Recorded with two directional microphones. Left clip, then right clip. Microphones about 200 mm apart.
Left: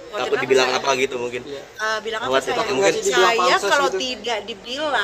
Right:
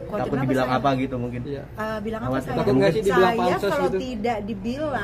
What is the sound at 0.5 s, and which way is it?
Speech, 65° left (ahead or behind).